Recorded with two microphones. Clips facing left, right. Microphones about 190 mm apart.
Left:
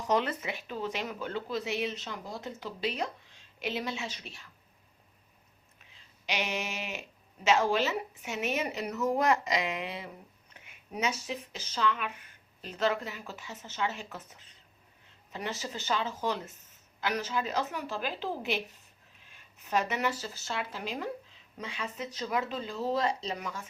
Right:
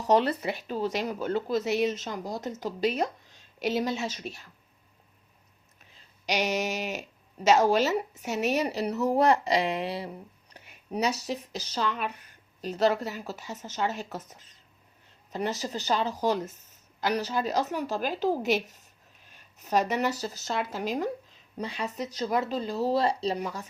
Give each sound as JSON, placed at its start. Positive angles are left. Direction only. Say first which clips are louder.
{"t": 0.0, "sound": "speech", "louder": "right 6 dB", "side_deg": -35}
{"t": 5.8, "sound": "a sound", "louder": "right 6 dB", "side_deg": -40}
{"t": 7.4, "sound": "speech", "louder": "right 5 dB", "side_deg": -40}